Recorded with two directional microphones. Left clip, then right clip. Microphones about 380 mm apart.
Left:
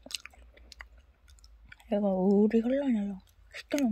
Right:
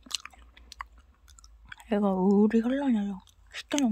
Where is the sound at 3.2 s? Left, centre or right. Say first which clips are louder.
Right 4 dB; centre.